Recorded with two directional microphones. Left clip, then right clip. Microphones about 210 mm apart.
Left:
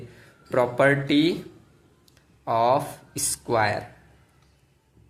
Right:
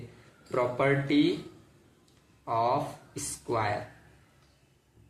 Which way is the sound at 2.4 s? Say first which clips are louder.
Left 6 dB; 50° left (ahead or behind).